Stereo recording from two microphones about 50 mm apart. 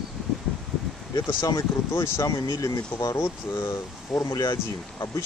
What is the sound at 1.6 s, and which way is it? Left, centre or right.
Speech, left.